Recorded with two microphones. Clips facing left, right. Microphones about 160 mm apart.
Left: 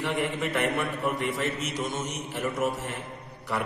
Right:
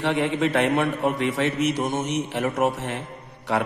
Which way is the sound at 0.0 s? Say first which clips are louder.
Right 6 dB; 75° right (ahead or behind).